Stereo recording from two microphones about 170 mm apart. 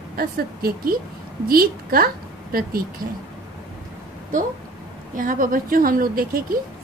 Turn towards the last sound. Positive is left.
turn(degrees=-60)  # may be behind; listen again after turning